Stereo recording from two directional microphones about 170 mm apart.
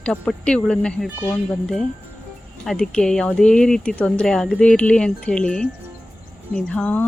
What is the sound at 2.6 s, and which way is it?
Speech, 5° left (ahead or behind).